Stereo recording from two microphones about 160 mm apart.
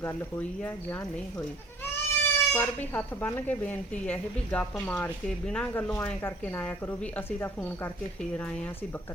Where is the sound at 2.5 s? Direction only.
10° left (ahead or behind).